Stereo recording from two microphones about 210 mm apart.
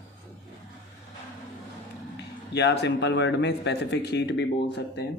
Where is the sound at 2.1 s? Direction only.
55° left (ahead or behind).